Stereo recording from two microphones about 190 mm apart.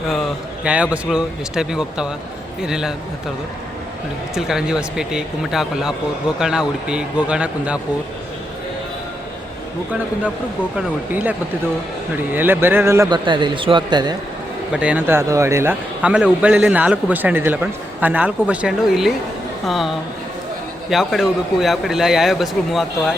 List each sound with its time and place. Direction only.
0.6 s a man's voice: 5° right (ahead or behind)
4.4 s a man's voice: 5° right (ahead or behind)
10.8 s a man's voice: 10° right (ahead or behind)
14.7 s a man's voice: 5° right (ahead or behind)
20.9 s a man's voice: centre (ahead or behind)